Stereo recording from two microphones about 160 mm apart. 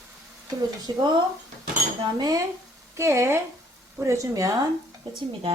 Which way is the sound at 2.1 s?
25° right (ahead or behind).